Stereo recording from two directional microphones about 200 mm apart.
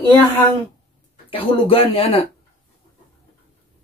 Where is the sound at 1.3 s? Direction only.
25° left (ahead or behind).